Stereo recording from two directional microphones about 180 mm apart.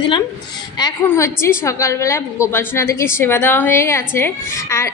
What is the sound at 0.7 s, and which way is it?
A woman's voice, 20° left (ahead or behind).